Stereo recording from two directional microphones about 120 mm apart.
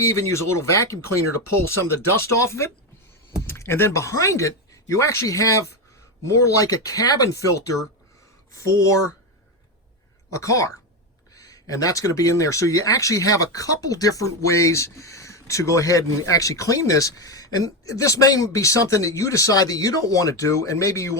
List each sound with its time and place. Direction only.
0.1 s speech: 25° left (ahead or behind)
10.3 s speech: 25° left (ahead or behind)